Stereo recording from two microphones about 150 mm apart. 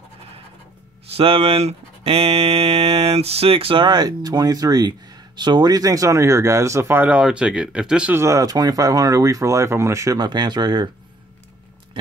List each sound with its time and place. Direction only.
1.1 s speech: 40° right (ahead or behind); by 8.2 s 5° right (ahead or behind)
8.2 s speech: 20° right (ahead or behind)